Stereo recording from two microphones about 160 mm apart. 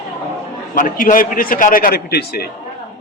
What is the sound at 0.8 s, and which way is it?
A man's voice, 60° left (ahead or behind).